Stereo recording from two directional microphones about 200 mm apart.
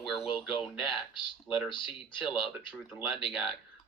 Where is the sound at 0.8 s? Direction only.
25° left (ahead or behind).